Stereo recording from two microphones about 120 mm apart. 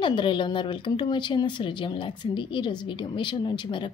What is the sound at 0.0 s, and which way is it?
A woman's voice, 40° left (ahead or behind).